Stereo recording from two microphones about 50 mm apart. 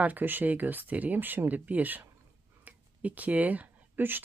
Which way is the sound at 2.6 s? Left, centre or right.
Right.